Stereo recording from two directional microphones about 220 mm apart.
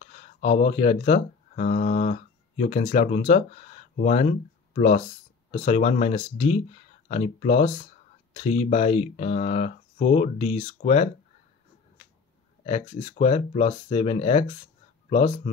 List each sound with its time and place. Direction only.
0.0 s speech: 30° left (ahead or behind)
12.6 s speech: 30° left (ahead or behind)